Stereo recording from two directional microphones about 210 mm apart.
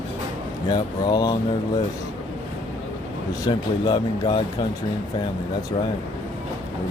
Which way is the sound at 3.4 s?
20° left (ahead or behind).